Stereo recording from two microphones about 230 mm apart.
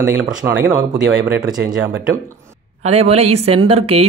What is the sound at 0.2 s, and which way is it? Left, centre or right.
Speech, centre.